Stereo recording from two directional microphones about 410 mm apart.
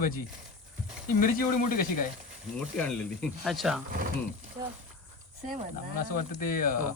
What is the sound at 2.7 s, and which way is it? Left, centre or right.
Speech, centre.